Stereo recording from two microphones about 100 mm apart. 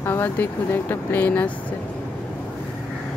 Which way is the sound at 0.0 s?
20° left (ahead or behind).